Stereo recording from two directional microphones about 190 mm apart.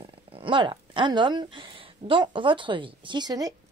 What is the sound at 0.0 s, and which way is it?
A woman's voice, 25° right (ahead or behind).